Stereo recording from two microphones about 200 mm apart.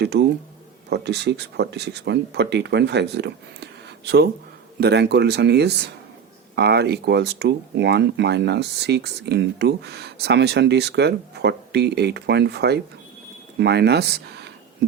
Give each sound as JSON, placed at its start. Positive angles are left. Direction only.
{"t": 0.0, "sound": "speech", "side_deg": -55}